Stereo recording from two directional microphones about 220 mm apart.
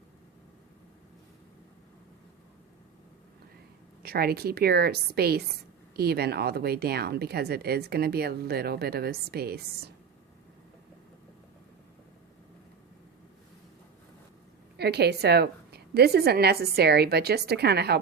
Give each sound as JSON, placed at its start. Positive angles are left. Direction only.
{"t": 4.0, "sound": "speech", "side_deg": -45}
{"t": 14.8, "sound": "speech", "side_deg": -50}